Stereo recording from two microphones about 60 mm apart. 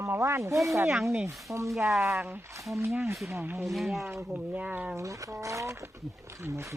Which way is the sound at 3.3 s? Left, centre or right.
Right.